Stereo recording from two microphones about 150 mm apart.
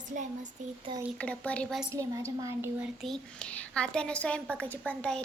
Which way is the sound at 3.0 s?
5° left (ahead or behind).